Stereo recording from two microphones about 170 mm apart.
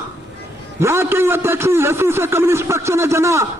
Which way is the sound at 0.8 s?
15° right (ahead or behind).